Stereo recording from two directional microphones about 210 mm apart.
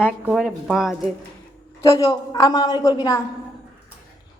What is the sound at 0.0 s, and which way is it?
Speech, 5° right (ahead or behind).